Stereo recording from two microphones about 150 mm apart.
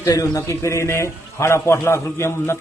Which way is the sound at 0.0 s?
20° left (ahead or behind).